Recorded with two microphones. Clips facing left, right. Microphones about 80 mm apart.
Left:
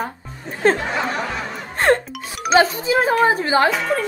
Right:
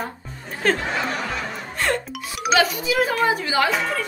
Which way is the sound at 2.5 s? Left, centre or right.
Left.